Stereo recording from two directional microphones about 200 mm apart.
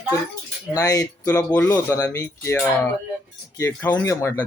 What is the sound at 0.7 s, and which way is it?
Speech, 20° left (ahead or behind).